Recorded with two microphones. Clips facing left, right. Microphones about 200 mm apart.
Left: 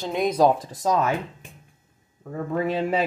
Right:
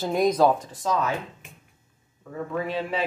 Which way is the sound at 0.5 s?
40° left (ahead or behind).